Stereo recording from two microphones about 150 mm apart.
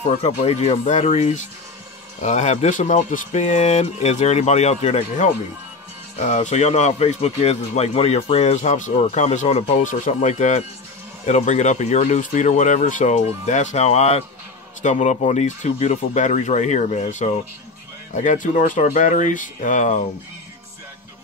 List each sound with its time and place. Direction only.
0.0 s speech: 50° left (ahead or behind)